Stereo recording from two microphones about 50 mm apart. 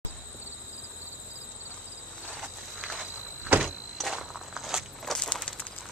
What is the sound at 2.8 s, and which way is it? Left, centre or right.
Walk, right.